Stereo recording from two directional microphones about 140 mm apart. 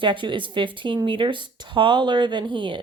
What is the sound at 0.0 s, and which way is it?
Speech, 35° right (ahead or behind).